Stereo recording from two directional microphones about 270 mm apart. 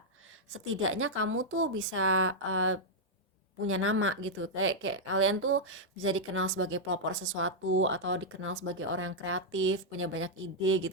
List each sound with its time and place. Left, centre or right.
0.5 s a woman's voice: right